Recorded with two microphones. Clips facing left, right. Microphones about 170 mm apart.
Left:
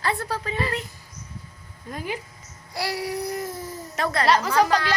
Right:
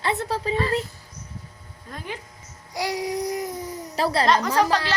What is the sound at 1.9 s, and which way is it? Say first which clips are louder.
Speech: left 4 dB; 10° left (ahead or behind).